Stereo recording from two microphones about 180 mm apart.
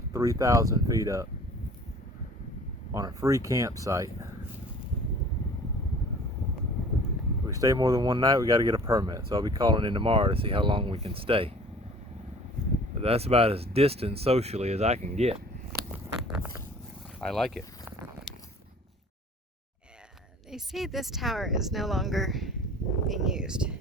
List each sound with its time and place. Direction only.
0.1 s speech: 20° right (ahead or behind)
2.9 s speech: 20° right (ahead or behind)
7.4 s speech: 20° right (ahead or behind)
13.0 s speech: 35° right (ahead or behind)
17.2 s speech: centre (ahead or behind)
20.5 s speech: centre (ahead or behind)